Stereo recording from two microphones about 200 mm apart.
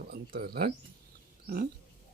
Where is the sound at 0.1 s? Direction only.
50° right (ahead or behind).